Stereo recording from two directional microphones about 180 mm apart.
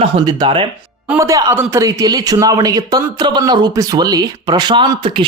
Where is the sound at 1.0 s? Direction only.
15° right (ahead or behind).